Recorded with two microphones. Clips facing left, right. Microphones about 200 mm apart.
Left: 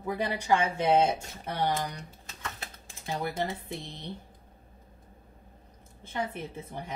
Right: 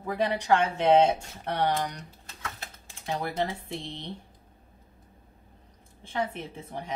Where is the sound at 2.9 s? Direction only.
5° left (ahead or behind).